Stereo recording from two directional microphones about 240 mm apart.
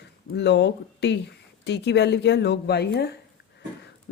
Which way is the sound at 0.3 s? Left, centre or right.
Left.